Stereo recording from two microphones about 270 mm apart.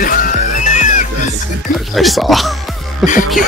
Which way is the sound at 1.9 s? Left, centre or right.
Centre.